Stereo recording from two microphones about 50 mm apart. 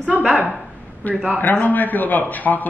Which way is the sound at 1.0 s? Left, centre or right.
Left.